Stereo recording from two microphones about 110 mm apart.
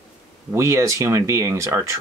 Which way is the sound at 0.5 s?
25° right (ahead or behind).